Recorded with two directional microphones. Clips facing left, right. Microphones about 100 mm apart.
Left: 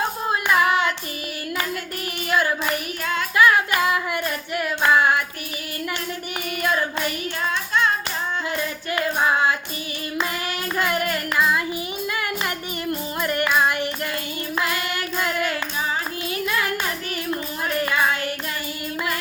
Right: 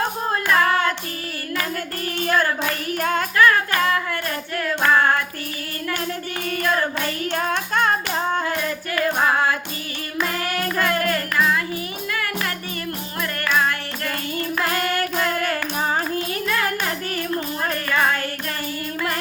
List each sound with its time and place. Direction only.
0.3 s hands: 15° left (ahead or behind)
2.3 s hands: 15° left (ahead or behind)
3.0 s music: 45° right (ahead or behind)
3.3 s music: 15° left (ahead or behind)
7.3 s child singing: 50° right (ahead or behind)
8.4 s music: 20° left (ahead or behind)
10.8 s music: 20° left (ahead or behind)
13.2 s music: 20° left (ahead or behind)
14.6 s child singing: 45° right (ahead or behind)